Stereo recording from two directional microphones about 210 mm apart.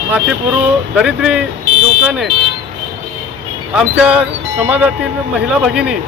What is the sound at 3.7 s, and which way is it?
Speech, 5° right (ahead or behind).